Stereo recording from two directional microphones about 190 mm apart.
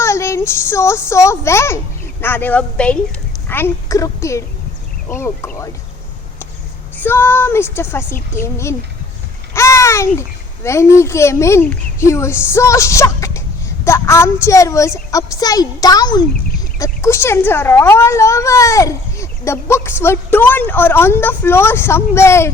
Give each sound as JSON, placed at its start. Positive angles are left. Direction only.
{"t": 0.0, "sound": "a child's voice", "side_deg": 15}
{"t": 6.9, "sound": "a child's voice", "side_deg": 10}